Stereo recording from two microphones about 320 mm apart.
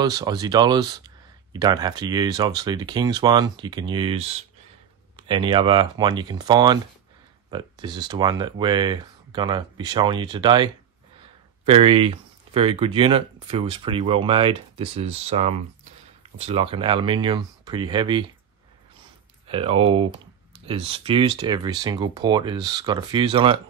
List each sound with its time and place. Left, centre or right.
0.0 s speech: centre
19.4 s speech: centre